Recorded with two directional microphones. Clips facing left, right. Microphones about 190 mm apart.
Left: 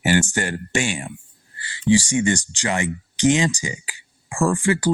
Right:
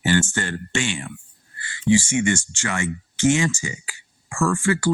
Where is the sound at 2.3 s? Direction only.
15° left (ahead or behind).